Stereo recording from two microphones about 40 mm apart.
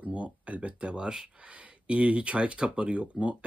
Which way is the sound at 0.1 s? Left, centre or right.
Right.